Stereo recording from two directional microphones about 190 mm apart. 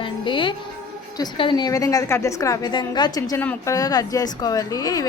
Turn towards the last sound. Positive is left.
turn(degrees=20)  # may be behind; listen again after turning